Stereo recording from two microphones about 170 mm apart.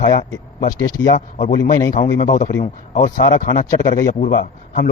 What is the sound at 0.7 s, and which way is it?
Speech, 20° left (ahead or behind).